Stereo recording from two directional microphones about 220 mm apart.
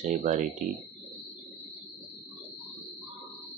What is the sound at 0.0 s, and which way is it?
Speech, 35° right (ahead or behind).